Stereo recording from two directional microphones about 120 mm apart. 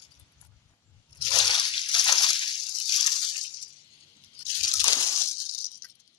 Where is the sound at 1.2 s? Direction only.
40° left (ahead or behind).